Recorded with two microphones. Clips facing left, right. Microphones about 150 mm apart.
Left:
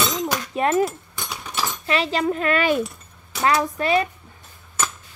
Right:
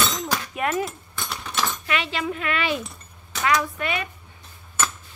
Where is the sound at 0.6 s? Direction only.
35° left (ahead or behind).